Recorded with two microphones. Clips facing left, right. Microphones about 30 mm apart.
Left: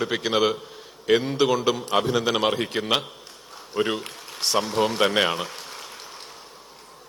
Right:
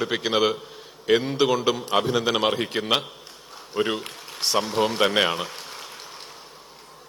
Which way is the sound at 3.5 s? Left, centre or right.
Centre.